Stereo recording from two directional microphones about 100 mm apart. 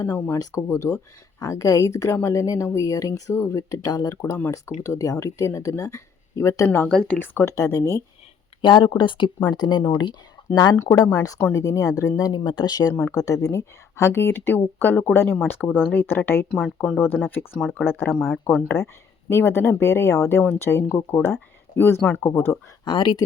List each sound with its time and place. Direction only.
0.3 s speech: 30° left (ahead or behind)
6.8 s speech: 10° left (ahead or behind)
7.2 s speech: 20° left (ahead or behind)
7.5 s speech: 35° left (ahead or behind)
8.6 s speech: 50° left (ahead or behind)
10.5 s speech: 40° left (ahead or behind)
11.3 s speech: 20° left (ahead or behind)
11.6 s speech: 30° left (ahead or behind)
12.9 s speech: 25° left (ahead or behind)
16.5 s speech: centre (ahead or behind)
17.7 s speech: 20° left (ahead or behind)
18.1 s speech: centre (ahead or behind)
18.7 s speech: 25° left (ahead or behind)
22.8 s speech: 50° left (ahead or behind)